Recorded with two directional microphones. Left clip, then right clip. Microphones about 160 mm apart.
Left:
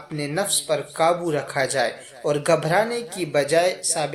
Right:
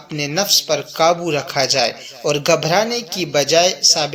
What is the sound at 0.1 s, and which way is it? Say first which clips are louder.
Speech: right 8 dB; 30° right (ahead or behind).